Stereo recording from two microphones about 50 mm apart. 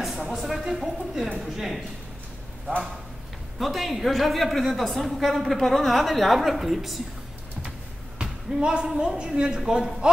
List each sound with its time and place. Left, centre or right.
0.0 s a sound: centre
0.4 s a woman's voice: centre
3.5 s a woman's voice: centre
8.2 s a woman's voice: centre